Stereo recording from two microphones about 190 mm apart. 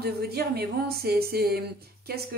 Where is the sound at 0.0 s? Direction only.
55° right (ahead or behind).